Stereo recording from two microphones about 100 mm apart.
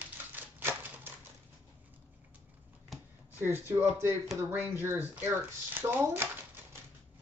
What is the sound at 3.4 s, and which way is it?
Speech, 20° right (ahead or behind).